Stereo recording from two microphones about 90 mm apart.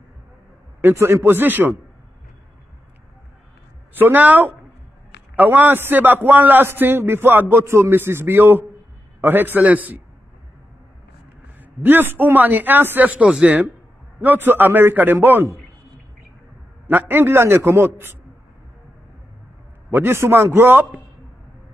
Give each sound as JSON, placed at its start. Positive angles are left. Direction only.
{"t": 0.7, "sound": "a man's voice", "side_deg": -25}
{"t": 4.0, "sound": "a man's voice", "side_deg": -20}
{"t": 11.8, "sound": "a man's voice", "side_deg": -20}
{"t": 16.8, "sound": "a man's voice", "side_deg": -25}
{"t": 19.9, "sound": "a man's voice", "side_deg": -25}